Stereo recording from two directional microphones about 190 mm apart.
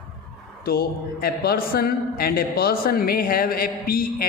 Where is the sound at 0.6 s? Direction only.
55° left (ahead or behind).